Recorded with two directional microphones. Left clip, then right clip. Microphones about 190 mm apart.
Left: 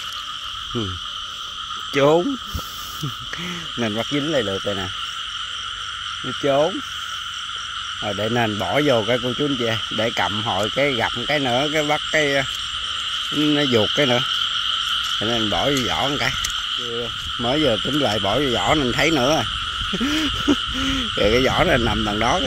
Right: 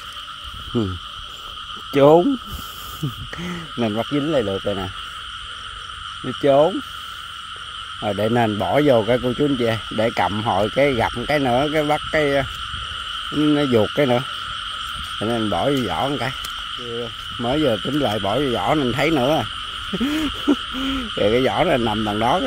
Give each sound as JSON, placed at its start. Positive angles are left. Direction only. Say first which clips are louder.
{"t": 2.0, "sound": "frog", "louder": "right 4 dB", "side_deg": -10}
{"t": 3.7, "sound": "frog", "louder": "right 2 dB", "side_deg": -15}
{"t": 6.2, "sound": "speech", "louder": "right 4 dB", "side_deg": -25}
{"t": 8.0, "sound": "speech", "louder": "right 3 dB", "side_deg": -25}
{"t": 8.5, "sound": "speech", "louder": "right 2 dB", "side_deg": -15}
{"t": 13.3, "sound": "frog", "louder": "right 1 dB", "side_deg": -15}
{"t": 13.9, "sound": "speech", "louder": "even", "side_deg": -20}
{"t": 15.1, "sound": "frog", "louder": "left 1 dB", "side_deg": -15}
{"t": 16.4, "sound": "speech", "louder": "left 4 dB", "side_deg": -5}
{"t": 18.7, "sound": "frog", "louder": "left 1 dB", "side_deg": -10}
{"t": 19.9, "sound": "owl", "louder": "even", "side_deg": -15}
{"t": 20.7, "sound": "frog", "louder": "left 2 dB", "side_deg": -10}
{"t": 21.9, "sound": "speech", "louder": "even", "side_deg": 0}